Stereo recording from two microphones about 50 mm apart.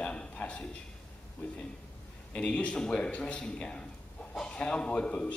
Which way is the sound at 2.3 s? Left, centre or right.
Left.